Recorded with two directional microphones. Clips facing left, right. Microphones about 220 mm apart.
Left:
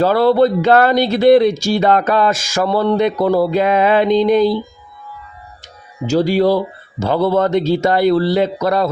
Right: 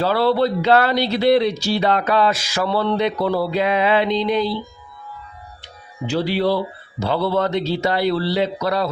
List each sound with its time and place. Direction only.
0.0 s speech: 45° left (ahead or behind)
6.1 s speech: 45° left (ahead or behind)